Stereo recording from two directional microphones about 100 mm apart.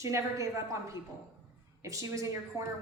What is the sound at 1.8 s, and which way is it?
Speech, 30° right (ahead or behind).